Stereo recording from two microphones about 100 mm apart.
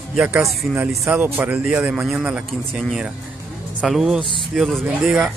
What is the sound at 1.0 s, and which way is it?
Speech, 15° right (ahead or behind).